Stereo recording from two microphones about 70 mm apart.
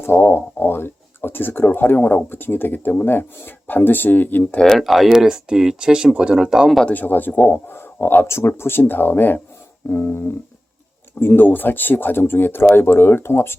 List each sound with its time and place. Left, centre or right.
0.0 s speech: left
4.6 s speech: centre
6.8 s speech: left